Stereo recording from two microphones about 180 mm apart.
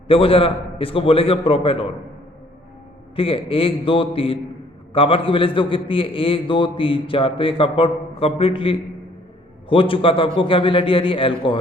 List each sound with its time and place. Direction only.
0.1 s a man's voice: 30° left (ahead or behind)
3.2 s a man's voice: 30° left (ahead or behind)